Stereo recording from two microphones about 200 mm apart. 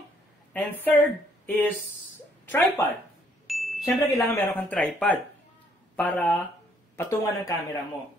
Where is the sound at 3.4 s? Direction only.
Centre (ahead or behind).